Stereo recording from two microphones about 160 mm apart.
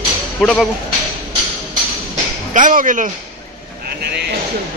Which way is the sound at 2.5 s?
55° right (ahead or behind).